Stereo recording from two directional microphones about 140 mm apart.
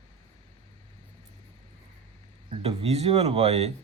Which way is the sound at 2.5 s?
45° right (ahead or behind).